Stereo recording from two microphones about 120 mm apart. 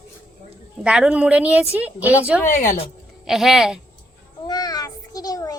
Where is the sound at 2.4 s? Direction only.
90° left.